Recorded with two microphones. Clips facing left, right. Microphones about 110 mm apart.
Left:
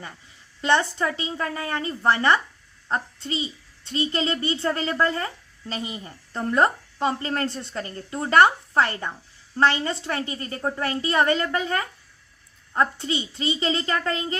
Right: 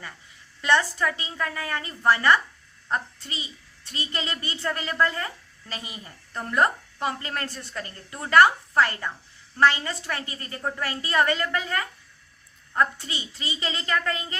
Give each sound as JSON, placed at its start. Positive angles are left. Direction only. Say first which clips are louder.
{"t": 0.6, "sound": "a child's voice", "louder": "left 1 dB", "side_deg": 25}